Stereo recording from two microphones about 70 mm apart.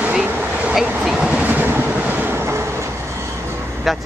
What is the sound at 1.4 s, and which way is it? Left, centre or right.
Train, right.